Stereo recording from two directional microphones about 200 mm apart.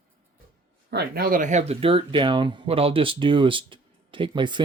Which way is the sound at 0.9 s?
50° right (ahead or behind).